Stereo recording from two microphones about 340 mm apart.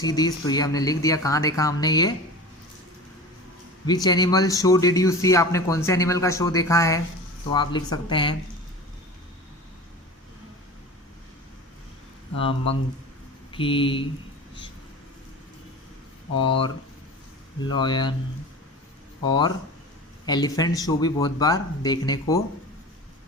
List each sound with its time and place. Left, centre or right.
0.0 s speech: centre
3.8 s speech: centre
12.4 s speech: centre
17.7 s speech: centre
19.2 s speech: centre